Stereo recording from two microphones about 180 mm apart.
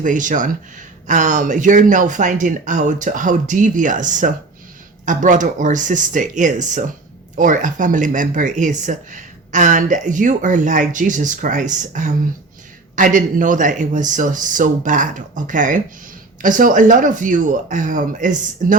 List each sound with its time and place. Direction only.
0.0 s speech: 45° right (ahead or behind)